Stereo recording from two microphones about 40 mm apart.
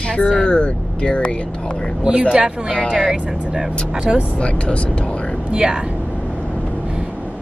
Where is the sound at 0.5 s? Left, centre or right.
Left.